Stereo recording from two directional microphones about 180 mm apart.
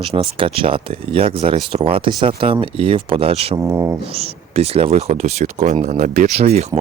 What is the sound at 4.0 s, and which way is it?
Speech, 35° right (ahead or behind).